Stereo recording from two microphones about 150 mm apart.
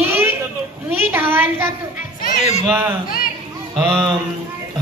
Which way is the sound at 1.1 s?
15° right (ahead or behind).